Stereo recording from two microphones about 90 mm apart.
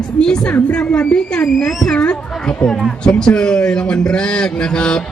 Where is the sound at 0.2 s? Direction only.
10° left (ahead or behind).